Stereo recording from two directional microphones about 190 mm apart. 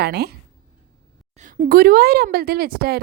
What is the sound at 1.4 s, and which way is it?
A woman's voice, 45° right (ahead or behind).